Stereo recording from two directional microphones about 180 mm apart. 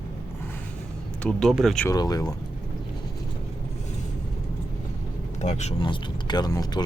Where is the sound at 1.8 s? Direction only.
20° left (ahead or behind).